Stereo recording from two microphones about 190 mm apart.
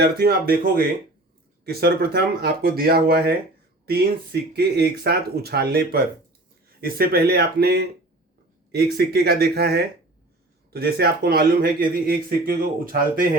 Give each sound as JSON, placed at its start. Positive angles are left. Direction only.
{"t": 0.0, "sound": "speech", "side_deg": -55}